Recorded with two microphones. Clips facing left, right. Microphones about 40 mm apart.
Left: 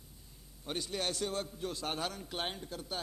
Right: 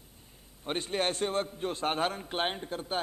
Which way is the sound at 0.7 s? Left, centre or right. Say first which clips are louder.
Right 6 dB; right.